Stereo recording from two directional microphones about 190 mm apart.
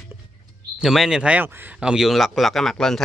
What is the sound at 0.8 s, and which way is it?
Speech, centre (ahead or behind).